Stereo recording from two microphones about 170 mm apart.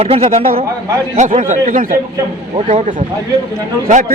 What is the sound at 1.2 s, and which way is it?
Speech, 50° right (ahead or behind).